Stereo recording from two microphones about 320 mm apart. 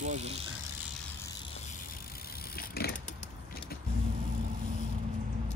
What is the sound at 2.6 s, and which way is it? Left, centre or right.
Vehicle, left.